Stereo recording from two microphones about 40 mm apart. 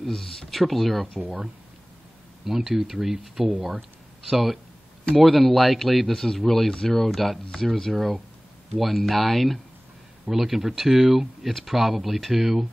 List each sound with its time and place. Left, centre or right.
0.0 s speech: centre
1.2 s speech: right
2.4 s speech: centre